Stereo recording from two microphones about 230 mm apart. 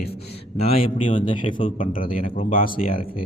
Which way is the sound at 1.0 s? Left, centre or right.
Left.